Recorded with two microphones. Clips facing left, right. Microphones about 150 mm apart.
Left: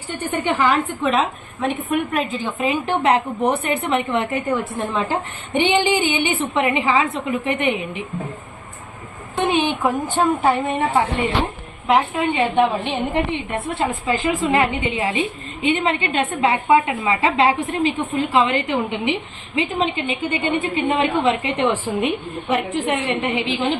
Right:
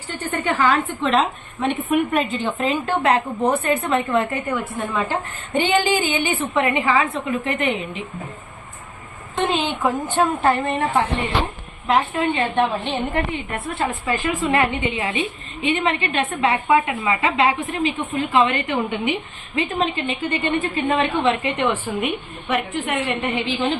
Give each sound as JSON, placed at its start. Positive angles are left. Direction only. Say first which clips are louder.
{"t": 0.3, "sound": "a woman's voice", "louder": "left 1 dB", "side_deg": 10}
{"t": 1.1, "sound": "speech", "louder": "right 1 dB", "side_deg": 0}
{"t": 2.8, "sound": "a woman's voice", "louder": "left 2 dB", "side_deg": 20}
{"t": 5.5, "sound": "a woman's voice", "louder": "left 1 dB", "side_deg": 15}
{"t": 9.5, "sound": "a woman's voice", "louder": "left 5 dB", "side_deg": 15}
{"t": 9.8, "sound": "a woman's voice", "louder": "left 1 dB", "side_deg": 0}
{"t": 21.5, "sound": "a woman's voice", "louder": "left 2 dB", "side_deg": 30}